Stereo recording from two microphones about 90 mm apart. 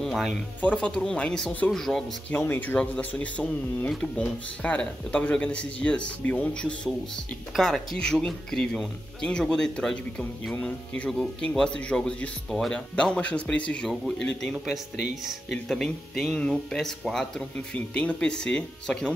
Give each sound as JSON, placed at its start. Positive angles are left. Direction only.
{"t": 0.0, "sound": "a sound", "side_deg": 0}
{"t": 0.6, "sound": "speech", "side_deg": 15}
{"t": 2.3, "sound": "speech", "side_deg": 20}
{"t": 7.5, "sound": "speech", "side_deg": 5}